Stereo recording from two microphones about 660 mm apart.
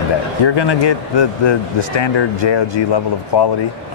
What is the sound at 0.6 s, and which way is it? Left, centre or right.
Speech, left.